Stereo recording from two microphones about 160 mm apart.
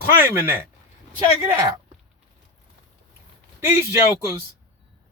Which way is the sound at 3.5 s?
20° right (ahead or behind).